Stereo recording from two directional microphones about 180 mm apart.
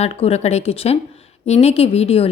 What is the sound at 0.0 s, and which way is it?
A woman's voice, 35° left (ahead or behind).